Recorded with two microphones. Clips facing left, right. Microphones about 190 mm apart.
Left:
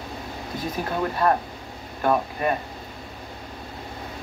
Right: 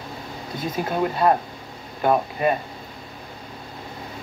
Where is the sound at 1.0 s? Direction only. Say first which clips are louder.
Right 2 dB; 15° right (ahead or behind).